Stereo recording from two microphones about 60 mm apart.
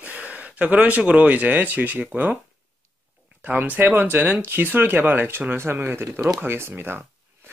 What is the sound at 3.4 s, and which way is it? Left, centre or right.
Speech, right.